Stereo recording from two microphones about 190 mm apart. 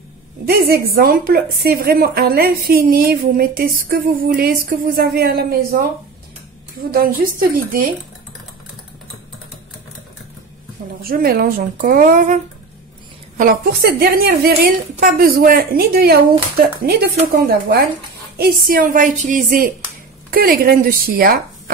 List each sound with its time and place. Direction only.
0.5 s a woman's voice: 55° right (ahead or behind)
11.0 s a woman's voice: 50° right (ahead or behind)
13.4 s a woman's voice: 50° right (ahead or behind)